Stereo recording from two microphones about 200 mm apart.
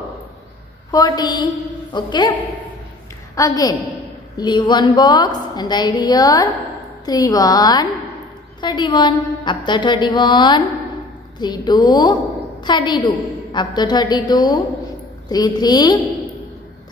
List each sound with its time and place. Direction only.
0.9 s a woman's voice: 20° left (ahead or behind)
3.3 s a woman's voice: 15° left (ahead or behind)